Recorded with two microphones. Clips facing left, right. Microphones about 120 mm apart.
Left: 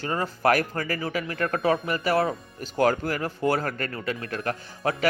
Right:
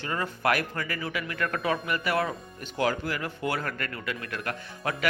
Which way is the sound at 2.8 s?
45° left (ahead or behind).